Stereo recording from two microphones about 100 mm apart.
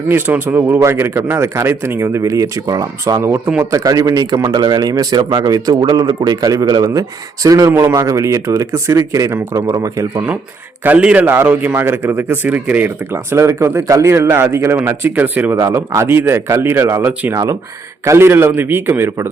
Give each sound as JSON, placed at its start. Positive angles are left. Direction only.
{"t": 0.1, "sound": "speech", "side_deg": -20}
{"t": 3.2, "sound": "speech", "side_deg": -25}
{"t": 3.6, "sound": "speech", "side_deg": -35}
{"t": 7.7, "sound": "speech", "side_deg": -20}
{"t": 7.9, "sound": "speech", "side_deg": -35}
{"t": 10.8, "sound": "a man's voice", "side_deg": -15}
{"t": 13.3, "sound": "speech", "side_deg": -30}
{"t": 15.6, "sound": "speech", "side_deg": -30}